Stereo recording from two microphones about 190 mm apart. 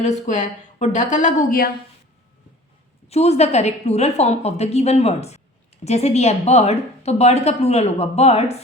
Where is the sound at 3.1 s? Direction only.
35° left (ahead or behind).